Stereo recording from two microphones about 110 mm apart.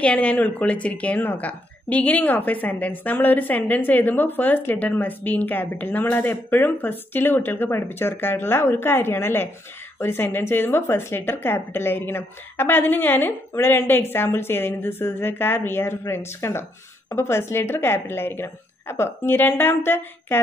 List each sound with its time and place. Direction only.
0.0 s a woman's voice: 10° left (ahead or behind)